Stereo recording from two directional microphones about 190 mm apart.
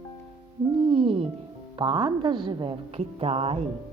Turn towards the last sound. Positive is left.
turn(degrees=-30)  # may be behind; listen again after turning